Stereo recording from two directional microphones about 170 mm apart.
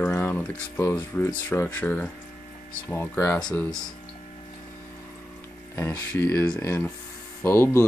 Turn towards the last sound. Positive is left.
turn(degrees=15)  # may be behind; listen again after turning